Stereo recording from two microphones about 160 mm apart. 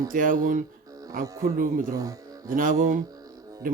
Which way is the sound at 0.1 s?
60° right (ahead or behind).